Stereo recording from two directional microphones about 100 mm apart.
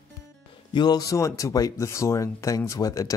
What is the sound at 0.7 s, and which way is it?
Speech, 45° left (ahead or behind).